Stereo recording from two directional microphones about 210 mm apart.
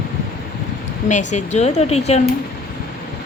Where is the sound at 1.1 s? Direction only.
35° left (ahead or behind).